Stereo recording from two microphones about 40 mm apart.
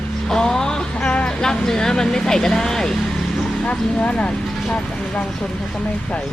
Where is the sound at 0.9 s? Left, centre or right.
Left; by 3.0 s centre.